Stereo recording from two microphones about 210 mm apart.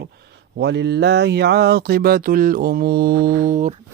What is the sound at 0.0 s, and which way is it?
Speech, 50° right (ahead or behind).